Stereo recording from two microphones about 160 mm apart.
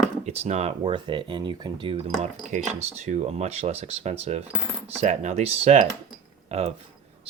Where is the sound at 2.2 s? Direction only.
50° right (ahead or behind).